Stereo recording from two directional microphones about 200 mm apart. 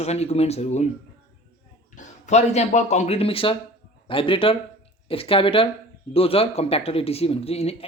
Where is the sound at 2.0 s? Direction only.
35° left (ahead or behind).